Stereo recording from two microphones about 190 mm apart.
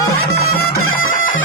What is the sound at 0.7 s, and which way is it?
Bagpipes, 90° left.